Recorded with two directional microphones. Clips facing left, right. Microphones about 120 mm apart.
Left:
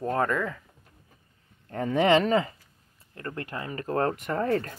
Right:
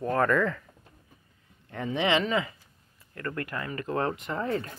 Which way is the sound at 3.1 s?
25° left (ahead or behind).